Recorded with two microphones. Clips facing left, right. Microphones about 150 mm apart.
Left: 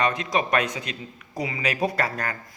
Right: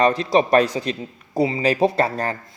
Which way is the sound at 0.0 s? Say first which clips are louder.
Right 7 dB; 35° right (ahead or behind).